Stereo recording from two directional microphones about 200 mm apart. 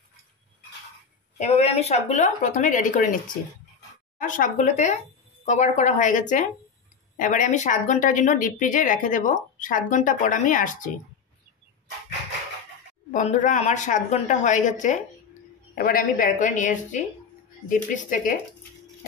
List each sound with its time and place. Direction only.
1.4 s a woman's voice: 35° left (ahead or behind)
4.2 s a woman's voice: 40° left (ahead or behind)
13.1 s a woman's voice: 40° left (ahead or behind)